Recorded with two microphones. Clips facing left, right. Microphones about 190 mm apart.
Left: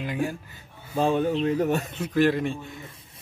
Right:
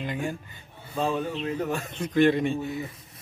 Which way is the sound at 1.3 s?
40° left (ahead or behind).